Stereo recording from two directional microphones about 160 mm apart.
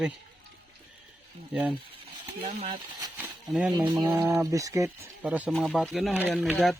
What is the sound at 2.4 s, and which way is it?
Speech, 40° right (ahead or behind).